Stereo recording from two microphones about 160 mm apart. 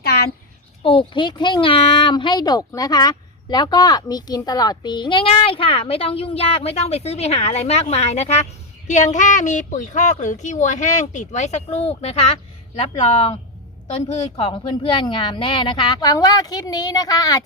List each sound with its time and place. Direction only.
0.0 s a sound: 80° left
0.8 s speech: 35° left (ahead or behind)
14.1 s speech: 40° left (ahead or behind); by 17.4 s 25° left (ahead or behind)